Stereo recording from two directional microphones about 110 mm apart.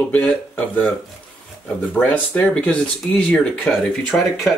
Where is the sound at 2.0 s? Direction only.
15° left (ahead or behind).